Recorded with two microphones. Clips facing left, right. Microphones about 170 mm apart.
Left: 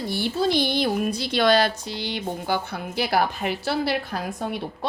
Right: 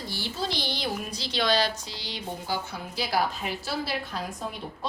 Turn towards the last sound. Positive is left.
turn(degrees=65)  # may be behind; listen again after turning